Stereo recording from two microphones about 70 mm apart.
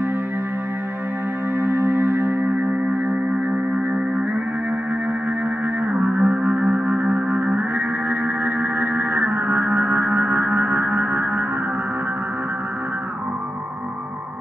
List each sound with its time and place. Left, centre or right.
1.6 s music: right
5.9 s music: right